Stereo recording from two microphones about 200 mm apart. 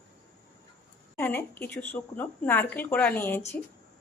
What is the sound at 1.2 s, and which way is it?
Speech, 10° left (ahead or behind).